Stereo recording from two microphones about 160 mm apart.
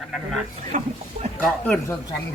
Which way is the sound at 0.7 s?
60° right (ahead or behind).